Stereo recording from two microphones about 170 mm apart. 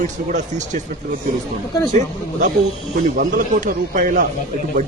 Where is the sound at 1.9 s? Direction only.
45° right (ahead or behind).